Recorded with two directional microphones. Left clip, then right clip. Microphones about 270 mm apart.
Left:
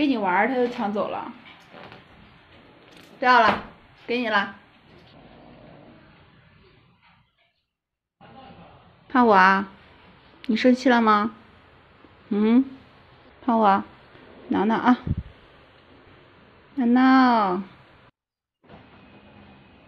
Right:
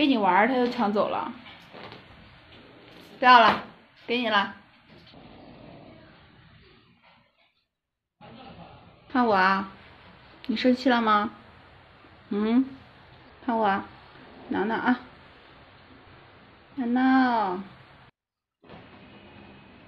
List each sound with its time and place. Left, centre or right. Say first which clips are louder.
0.0 s a woman's voice: even; centre
3.2 s a woman's voice: right 1 dB; centre
9.1 s speech: left 5 dB; left
12.3 s speech: left 4 dB; centre
16.7 s speech: left 5 dB; left